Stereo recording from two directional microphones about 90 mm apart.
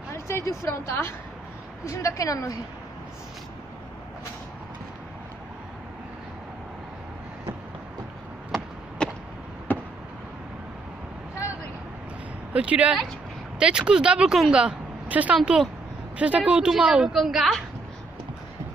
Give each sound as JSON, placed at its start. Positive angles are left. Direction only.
{"t": 0.1, "sound": "a woman's voice", "side_deg": 30}
{"t": 8.5, "sound": "chop", "side_deg": 10}
{"t": 9.7, "sound": "a sound", "side_deg": 20}
{"t": 12.5, "sound": "speech", "side_deg": -15}